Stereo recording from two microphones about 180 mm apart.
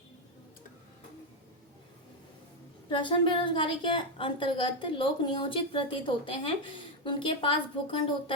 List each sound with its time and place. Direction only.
2.9 s a woman's voice: 25° left (ahead or behind)